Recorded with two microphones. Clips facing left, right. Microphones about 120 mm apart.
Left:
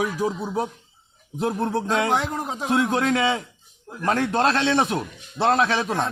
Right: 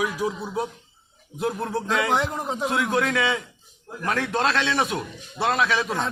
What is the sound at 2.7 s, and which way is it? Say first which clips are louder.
A man's voice: left 4 dB; 25° left (ahead or behind).